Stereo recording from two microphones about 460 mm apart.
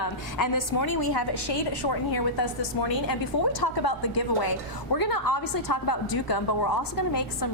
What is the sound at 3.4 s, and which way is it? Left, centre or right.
A woman's voice, left.